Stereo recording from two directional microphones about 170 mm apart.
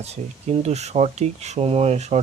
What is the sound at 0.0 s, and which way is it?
Speech, 40° right (ahead or behind).